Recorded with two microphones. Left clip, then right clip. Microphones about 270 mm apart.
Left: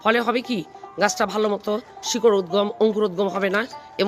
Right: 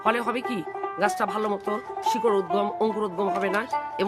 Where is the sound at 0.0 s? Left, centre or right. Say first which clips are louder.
Left 4 dB; centre.